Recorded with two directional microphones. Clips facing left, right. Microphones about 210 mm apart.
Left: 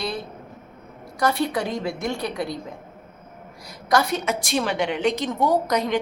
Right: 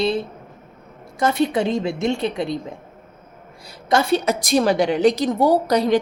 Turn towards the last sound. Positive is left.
turn(degrees=-35)  # may be behind; listen again after turning